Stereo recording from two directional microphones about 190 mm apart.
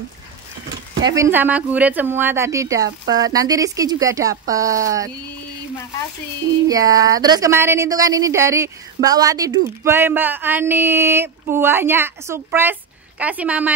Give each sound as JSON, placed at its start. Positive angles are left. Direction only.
{"t": 1.1, "sound": "speech", "side_deg": -15}
{"t": 6.7, "sound": "speech", "side_deg": -20}